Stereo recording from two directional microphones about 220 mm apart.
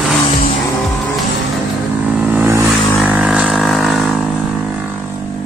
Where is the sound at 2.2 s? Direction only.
5° right (ahead or behind).